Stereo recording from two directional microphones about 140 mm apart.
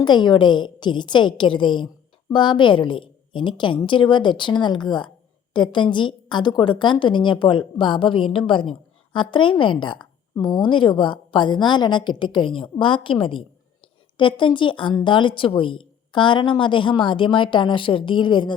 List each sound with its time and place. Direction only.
0.0 s a woman's voice: 35° left (ahead or behind)